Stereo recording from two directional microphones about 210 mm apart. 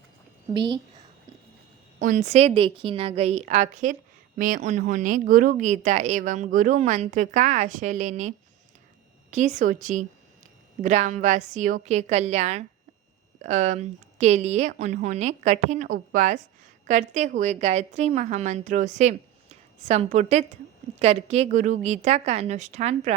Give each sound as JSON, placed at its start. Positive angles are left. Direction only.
{"t": 0.5, "sound": "a woman's voice", "side_deg": -20}
{"t": 2.0, "sound": "a woman's voice", "side_deg": -35}
{"t": 9.3, "sound": "a woman's voice", "side_deg": -35}